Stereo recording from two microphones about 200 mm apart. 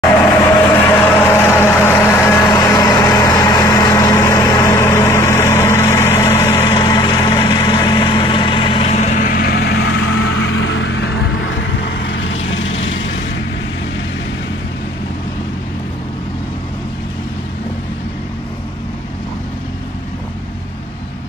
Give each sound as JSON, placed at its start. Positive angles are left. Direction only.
{"t": 0.8, "sound": "vehicle", "side_deg": 10}